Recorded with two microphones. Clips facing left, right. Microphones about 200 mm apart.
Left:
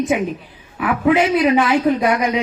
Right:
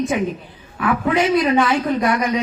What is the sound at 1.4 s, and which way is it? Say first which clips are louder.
A woman's voice: left 2 dB; 15° left (ahead or behind).